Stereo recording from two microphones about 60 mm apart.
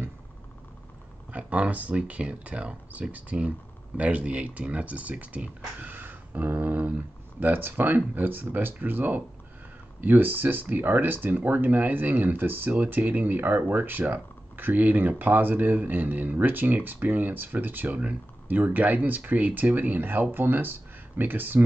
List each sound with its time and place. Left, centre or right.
1.3 s speech: right